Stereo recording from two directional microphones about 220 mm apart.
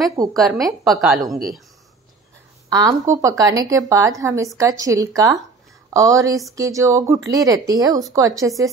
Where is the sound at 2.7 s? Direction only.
15° right (ahead or behind).